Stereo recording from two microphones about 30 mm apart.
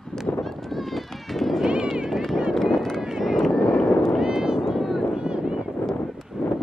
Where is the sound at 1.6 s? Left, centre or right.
Right.